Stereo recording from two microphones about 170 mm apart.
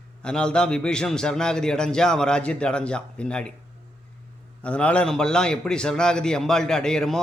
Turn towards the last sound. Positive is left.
turn(degrees=5)  # may be behind; listen again after turning